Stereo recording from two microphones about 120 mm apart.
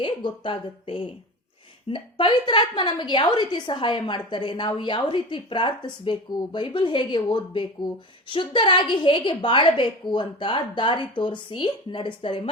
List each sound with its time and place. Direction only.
0.0 s a woman's voice: 40° left (ahead or behind)